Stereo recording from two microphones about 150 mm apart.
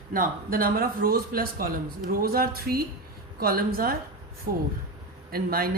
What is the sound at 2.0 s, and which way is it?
Speech, 85° right.